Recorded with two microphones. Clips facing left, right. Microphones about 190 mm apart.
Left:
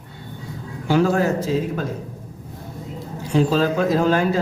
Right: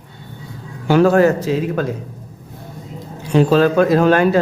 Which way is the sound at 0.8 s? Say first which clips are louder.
Right 6 dB; 65° right (ahead or behind).